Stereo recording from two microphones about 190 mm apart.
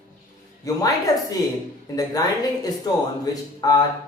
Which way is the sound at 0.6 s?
15° left (ahead or behind).